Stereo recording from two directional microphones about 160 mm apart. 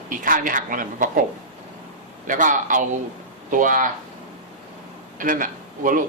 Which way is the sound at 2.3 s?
55° right (ahead or behind).